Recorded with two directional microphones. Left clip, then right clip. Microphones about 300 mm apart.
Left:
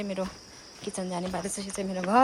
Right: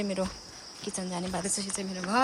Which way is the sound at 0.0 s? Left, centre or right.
Centre.